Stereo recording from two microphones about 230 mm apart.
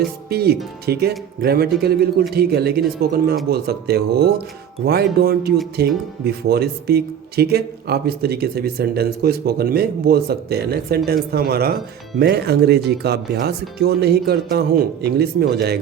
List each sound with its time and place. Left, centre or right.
0.3 s a man's voice: right